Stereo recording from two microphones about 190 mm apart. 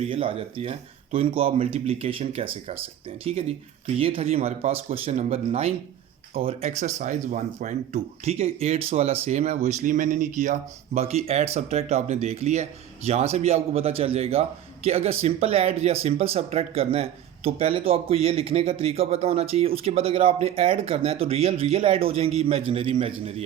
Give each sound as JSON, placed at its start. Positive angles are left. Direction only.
{"t": 0.0, "sound": "speech", "side_deg": -30}
{"t": 3.9, "sound": "speech", "side_deg": -30}